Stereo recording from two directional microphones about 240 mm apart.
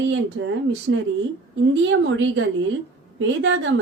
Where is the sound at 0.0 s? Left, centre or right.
Right.